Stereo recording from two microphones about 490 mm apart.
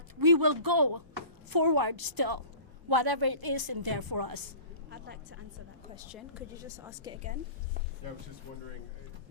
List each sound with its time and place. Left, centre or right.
0.2 s a woman's voice: right
4.9 s a woman's voice: right
6.1 s a woman's voice: centre